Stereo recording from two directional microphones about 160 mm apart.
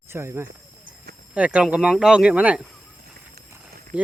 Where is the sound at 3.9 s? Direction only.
5° right (ahead or behind).